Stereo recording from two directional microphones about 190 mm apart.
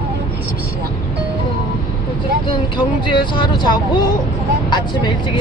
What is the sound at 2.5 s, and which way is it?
Speech, 25° left (ahead or behind).